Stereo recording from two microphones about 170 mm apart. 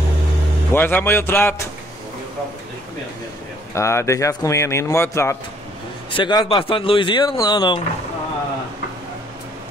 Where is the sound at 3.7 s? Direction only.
15° left (ahead or behind).